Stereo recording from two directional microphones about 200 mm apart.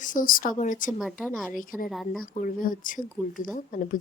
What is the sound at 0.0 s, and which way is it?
Speech, 40° left (ahead or behind).